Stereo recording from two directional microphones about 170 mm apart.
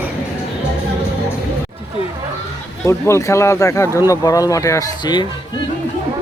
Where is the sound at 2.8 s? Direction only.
15° left (ahead or behind).